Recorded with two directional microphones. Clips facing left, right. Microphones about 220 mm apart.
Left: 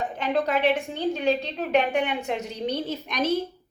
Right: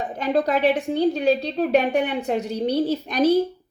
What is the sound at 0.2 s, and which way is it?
A woman's voice, 40° right (ahead or behind).